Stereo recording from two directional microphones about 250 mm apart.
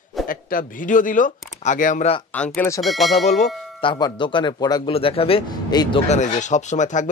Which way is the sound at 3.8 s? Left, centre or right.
Centre.